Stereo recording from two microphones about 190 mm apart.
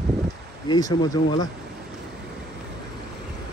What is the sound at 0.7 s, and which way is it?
Speech, 20° left (ahead or behind).